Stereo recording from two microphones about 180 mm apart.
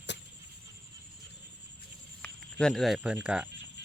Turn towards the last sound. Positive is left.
turn(degrees=-5)  # may be behind; listen again after turning